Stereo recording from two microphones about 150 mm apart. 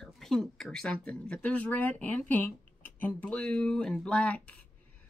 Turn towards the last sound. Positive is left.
turn(degrees=10)  # may be behind; listen again after turning